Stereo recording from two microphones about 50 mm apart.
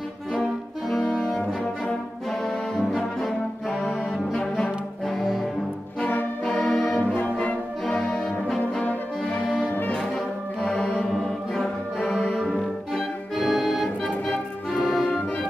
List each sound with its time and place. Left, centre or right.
2.4 s brass instrument: centre
6.6 s brass instrument: centre
6.9 s music: left
7.9 s music: left
9.7 s brass instrument: left
10.1 s brass instrument: centre
10.8 s music: left
11.1 s music: centre
12.9 s organ: centre